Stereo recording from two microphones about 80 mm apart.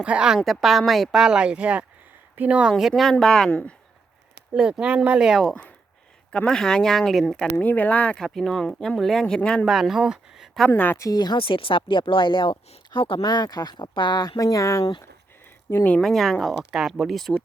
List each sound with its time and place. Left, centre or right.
0.0 s speech: centre
0.3 s speech: centre
4.5 s speech: centre
7.6 s speech: centre
8.3 s speech: centre
9.6 s speech: centre
10.7 s speech: left
10.9 s a woman's voice: left
11.2 s speech: left
15.7 s speech: left
16.0 s speech: centre